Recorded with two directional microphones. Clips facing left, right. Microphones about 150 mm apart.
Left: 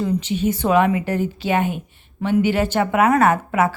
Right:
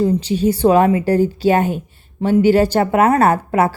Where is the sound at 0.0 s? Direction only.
35° right (ahead or behind).